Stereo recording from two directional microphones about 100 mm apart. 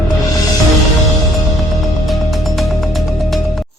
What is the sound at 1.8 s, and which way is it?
Music, centre (ahead or behind).